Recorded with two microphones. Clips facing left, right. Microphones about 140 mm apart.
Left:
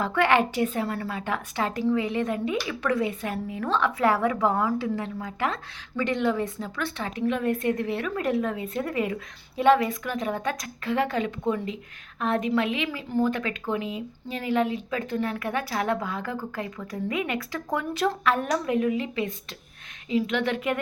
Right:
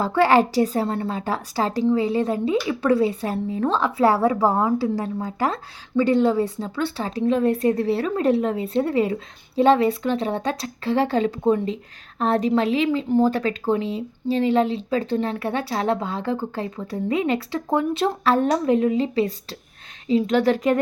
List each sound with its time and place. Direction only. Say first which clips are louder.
0.0 s speech: right 5 dB; 30° right (ahead or behind)
13.3 s speech: right 7 dB; 35° right (ahead or behind)